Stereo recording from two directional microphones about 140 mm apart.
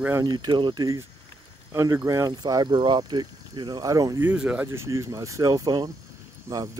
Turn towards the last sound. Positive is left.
turn(degrees=-25)  # may be behind; listen again after turning